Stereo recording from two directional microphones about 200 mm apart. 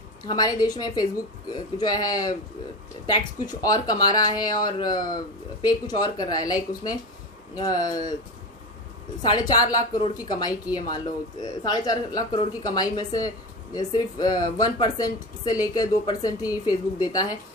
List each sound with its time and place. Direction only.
0.3 s speech: 20° left (ahead or behind)
9.2 s speech: 20° left (ahead or behind)